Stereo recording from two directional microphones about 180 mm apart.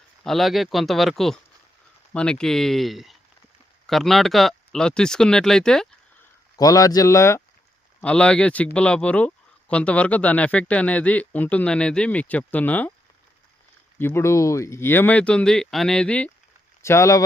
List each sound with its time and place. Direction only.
0.3 s speech: centre (ahead or behind)
6.6 s speech: 20° left (ahead or behind)
8.0 s speech: 5° left (ahead or behind)
14.0 s speech: 15° left (ahead or behind)